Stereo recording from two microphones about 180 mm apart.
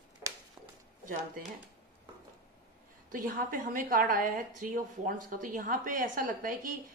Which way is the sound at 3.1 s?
50° right (ahead or behind).